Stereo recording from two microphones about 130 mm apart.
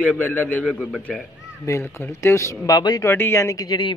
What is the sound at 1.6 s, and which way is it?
A man's voice, 20° left (ahead or behind).